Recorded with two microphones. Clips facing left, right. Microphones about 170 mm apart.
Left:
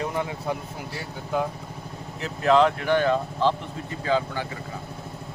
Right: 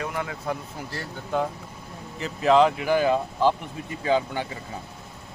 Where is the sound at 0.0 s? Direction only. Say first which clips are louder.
Left 2 dB; 25° left (ahead or behind).